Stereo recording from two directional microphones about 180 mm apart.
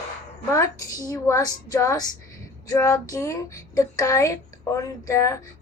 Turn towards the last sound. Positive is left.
turn(degrees=15)  # may be behind; listen again after turning